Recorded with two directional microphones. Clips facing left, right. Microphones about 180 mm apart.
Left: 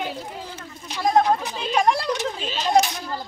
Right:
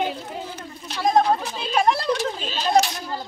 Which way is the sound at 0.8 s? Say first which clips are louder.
Even; 10° left (ahead or behind).